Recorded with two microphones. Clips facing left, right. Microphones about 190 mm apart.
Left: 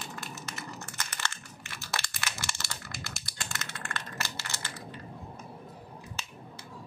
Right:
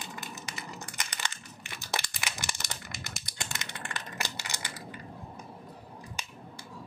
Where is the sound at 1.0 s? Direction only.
15° right (ahead or behind).